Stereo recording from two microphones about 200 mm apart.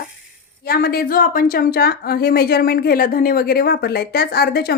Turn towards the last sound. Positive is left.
turn(degrees=55)  # may be behind; listen again after turning